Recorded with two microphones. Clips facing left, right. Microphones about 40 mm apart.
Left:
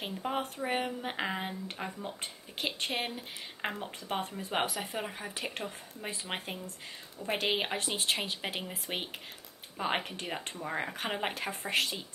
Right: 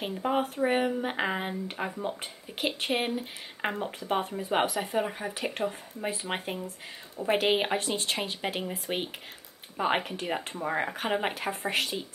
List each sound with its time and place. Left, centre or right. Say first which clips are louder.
0.1 s speech: right 7 dB; centre
7.8 s speech: right 2 dB; centre